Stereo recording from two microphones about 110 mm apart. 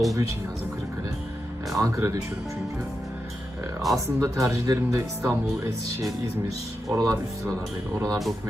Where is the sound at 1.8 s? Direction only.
25° right (ahead or behind).